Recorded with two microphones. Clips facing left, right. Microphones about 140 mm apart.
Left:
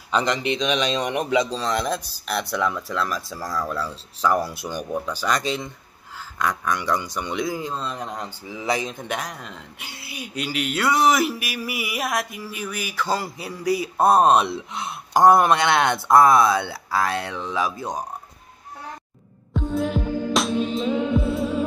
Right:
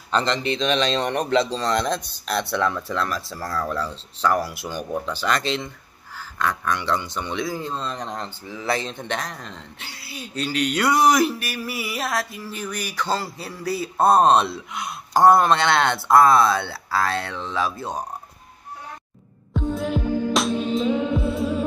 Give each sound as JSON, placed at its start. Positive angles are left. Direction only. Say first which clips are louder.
{"t": 0.1, "sound": "speech", "louder": "even", "side_deg": 10}
{"t": 4.4, "sound": "speech", "louder": "left 1 dB", "side_deg": 20}
{"t": 7.6, "sound": "speech", "louder": "even", "side_deg": 5}
{"t": 9.8, "sound": "speech", "louder": "left 2 dB", "side_deg": 20}
{"t": 13.1, "sound": "speech", "louder": "left 1 dB", "side_deg": 15}
{"t": 14.5, "sound": "speech", "louder": "left 1 dB", "side_deg": 20}
{"t": 19.5, "sound": "music", "louder": "left 1 dB", "side_deg": 0}